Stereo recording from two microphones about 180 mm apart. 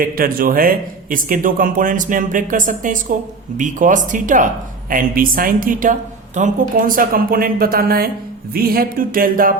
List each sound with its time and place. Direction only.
0.0 s a woman's voice: 55° right (ahead or behind)